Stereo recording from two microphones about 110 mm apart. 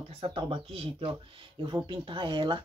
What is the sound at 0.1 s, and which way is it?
Speech, 60° right (ahead or behind).